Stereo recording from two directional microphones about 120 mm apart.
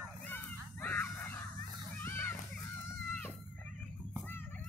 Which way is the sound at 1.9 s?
15° left (ahead or behind).